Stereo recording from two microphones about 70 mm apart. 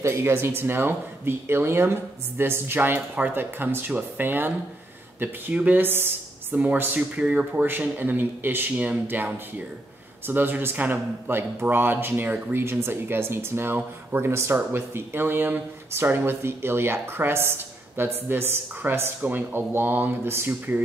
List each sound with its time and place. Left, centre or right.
0.0 s speech: right; by 7.6 s centre
7.6 s speech: right